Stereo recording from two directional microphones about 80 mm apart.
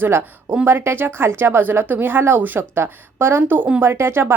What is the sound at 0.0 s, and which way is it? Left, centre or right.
Speech, right.